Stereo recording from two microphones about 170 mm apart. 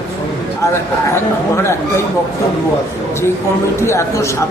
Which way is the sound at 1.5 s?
15° left (ahead or behind).